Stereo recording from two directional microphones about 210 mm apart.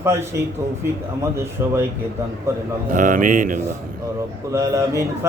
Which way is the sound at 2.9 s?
40° right (ahead or behind).